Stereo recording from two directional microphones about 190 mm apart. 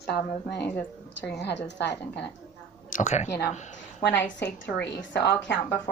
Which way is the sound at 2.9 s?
35° left (ahead or behind).